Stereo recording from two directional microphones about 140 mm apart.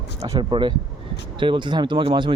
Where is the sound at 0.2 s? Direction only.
25° right (ahead or behind).